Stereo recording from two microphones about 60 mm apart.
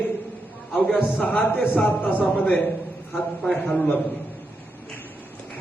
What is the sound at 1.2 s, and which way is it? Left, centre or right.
A man's voice, left.